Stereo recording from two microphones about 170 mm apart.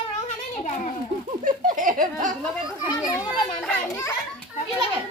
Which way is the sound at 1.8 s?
50° right (ahead or behind).